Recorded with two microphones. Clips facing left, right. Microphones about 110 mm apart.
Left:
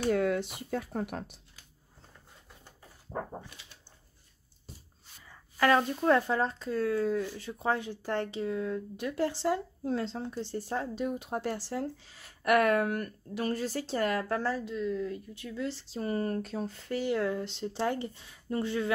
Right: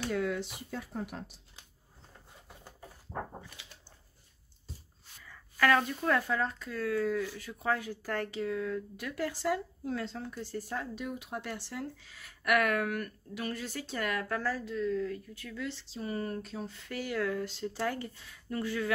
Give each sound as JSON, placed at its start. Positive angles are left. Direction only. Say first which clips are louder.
{"t": 0.0, "sound": "speech", "louder": "left 5 dB", "side_deg": 50}
{"t": 5.2, "sound": "speech", "louder": "left 2 dB", "side_deg": 25}
{"t": 15.7, "sound": "speech", "louder": "left 4 dB", "side_deg": 45}
{"t": 16.9, "sound": "speech", "louder": "left 3 dB", "side_deg": 25}